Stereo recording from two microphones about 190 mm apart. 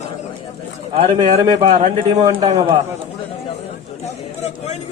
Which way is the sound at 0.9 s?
35° right (ahead or behind).